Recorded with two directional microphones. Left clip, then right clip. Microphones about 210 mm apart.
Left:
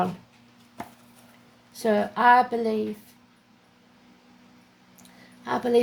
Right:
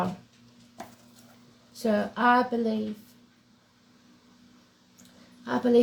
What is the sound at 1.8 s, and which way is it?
Speech, 45° left (ahead or behind).